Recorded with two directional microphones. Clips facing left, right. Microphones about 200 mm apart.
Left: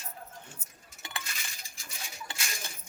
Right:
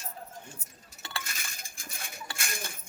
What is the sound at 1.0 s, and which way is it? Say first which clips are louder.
Chink: right 1 dB; 15° left (ahead or behind).